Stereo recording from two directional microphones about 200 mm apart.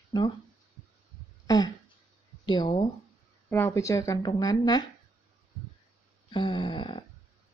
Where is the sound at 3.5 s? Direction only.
10° left (ahead or behind).